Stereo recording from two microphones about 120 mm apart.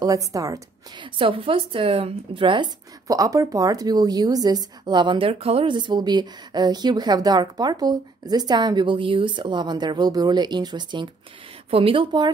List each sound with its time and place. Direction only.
0.0 s a woman's voice: 30° right (ahead or behind)
0.9 s speech: 45° right (ahead or behind)
3.1 s a woman's voice: 30° right (ahead or behind)